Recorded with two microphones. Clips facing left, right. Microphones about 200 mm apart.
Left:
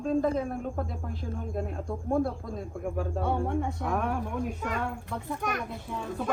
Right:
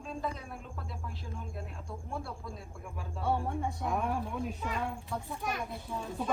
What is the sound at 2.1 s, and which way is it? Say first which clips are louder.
Speech: left 14 dB; 50° left (ahead or behind).